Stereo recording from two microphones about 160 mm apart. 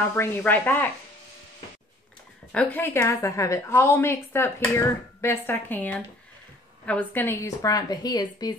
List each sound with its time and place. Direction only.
0.1 s a woman's voice: 10° left (ahead or behind)
2.5 s a woman's voice: 10° left (ahead or behind)